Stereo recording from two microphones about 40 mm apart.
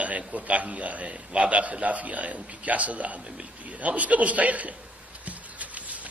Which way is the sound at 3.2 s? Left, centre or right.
Right.